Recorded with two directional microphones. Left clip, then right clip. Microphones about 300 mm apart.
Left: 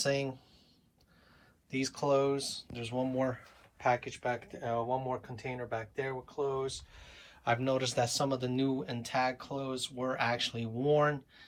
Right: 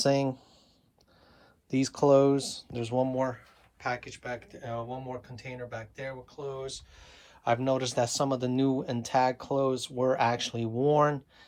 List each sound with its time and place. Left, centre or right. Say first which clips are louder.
0.0 s speech: right 6 dB; centre
1.7 s speech: right 7 dB; centre
3.0 s speech: right 3 dB; centre